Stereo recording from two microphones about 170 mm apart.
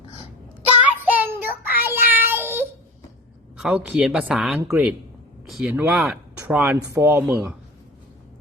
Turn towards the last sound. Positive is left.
turn(degrees=-15)  # may be behind; listen again after turning